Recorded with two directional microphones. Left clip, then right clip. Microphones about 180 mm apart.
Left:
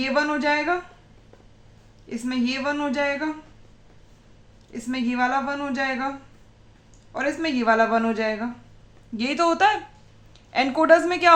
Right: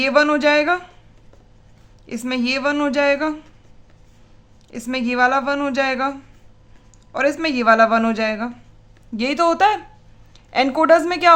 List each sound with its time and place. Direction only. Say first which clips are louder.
0.0 s a man's voice: right 7 dB; 45° right (ahead or behind)
2.0 s a man's voice: right 5 dB; 45° right (ahead or behind)
4.7 s a man's voice: right 5 dB; 40° right (ahead or behind)